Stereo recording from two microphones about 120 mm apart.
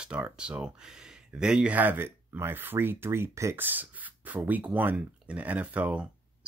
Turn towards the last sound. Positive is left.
turn(degrees=-10)  # may be behind; listen again after turning